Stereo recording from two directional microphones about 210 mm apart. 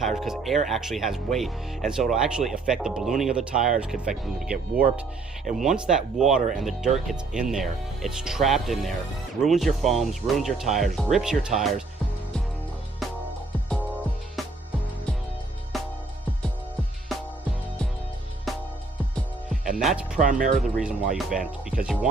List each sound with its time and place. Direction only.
0.0 s speech: centre (ahead or behind)
13.7 s music: 5° left (ahead or behind)
18.5 s music: centre (ahead or behind)
19.7 s speech: centre (ahead or behind)
20.1 s speech: 40° right (ahead or behind)
21.2 s speech: centre (ahead or behind)